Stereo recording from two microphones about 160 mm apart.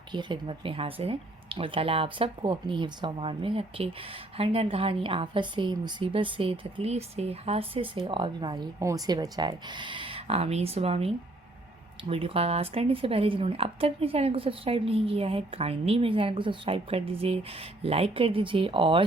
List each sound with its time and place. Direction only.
0.1 s a woman's voice: 30° right (ahead or behind)